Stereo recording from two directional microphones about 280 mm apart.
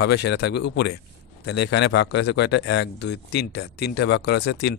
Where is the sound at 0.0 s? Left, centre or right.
Left.